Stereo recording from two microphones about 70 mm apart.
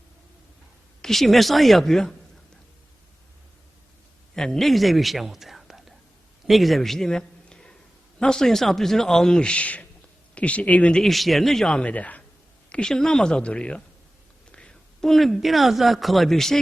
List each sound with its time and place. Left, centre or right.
1.0 s speech: centre
4.4 s a man's voice: centre
11.0 s speech: centre
11.7 s speech: centre
12.7 s a man's voice: centre